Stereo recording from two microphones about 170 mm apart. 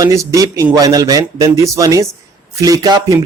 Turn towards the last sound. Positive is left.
turn(degrees=-20)  # may be behind; listen again after turning